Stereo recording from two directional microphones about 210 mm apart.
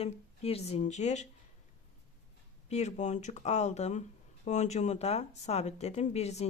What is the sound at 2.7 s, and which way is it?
Speech, 30° left (ahead or behind).